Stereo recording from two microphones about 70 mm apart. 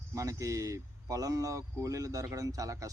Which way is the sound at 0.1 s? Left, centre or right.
Right.